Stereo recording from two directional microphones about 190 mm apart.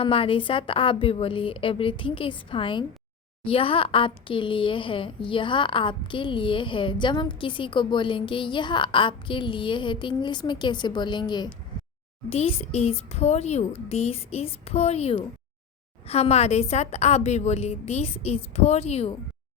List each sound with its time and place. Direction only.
0.0 s a woman's voice: 30° left (ahead or behind)